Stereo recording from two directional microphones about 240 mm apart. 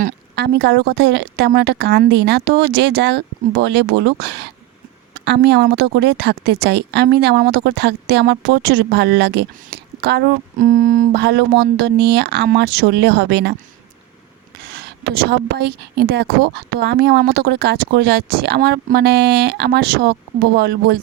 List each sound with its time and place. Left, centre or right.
0.0 s speech: right
14.8 s speech: right